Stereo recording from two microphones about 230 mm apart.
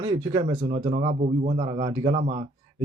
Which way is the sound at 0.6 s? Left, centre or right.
Right.